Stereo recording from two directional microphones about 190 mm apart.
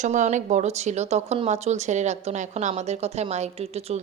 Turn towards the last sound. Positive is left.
turn(degrees=-35)  # may be behind; listen again after turning